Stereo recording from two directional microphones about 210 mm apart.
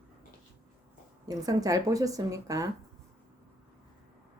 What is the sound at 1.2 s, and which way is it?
A woman's voice, 15° right (ahead or behind).